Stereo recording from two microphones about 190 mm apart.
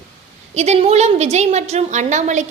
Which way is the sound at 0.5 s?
35° right (ahead or behind).